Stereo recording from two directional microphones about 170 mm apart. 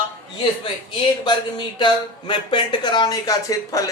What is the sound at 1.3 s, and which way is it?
Speech, 25° left (ahead or behind).